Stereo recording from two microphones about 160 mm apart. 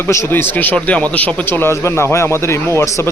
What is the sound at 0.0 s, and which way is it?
Speech, 15° left (ahead or behind).